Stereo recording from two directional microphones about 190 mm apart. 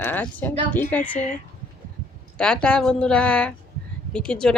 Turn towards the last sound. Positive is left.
turn(degrees=5)  # may be behind; listen again after turning